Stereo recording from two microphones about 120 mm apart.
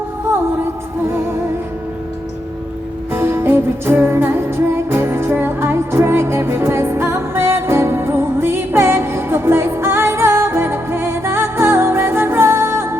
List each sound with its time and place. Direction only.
3.1 s music: 20° right (ahead or behind)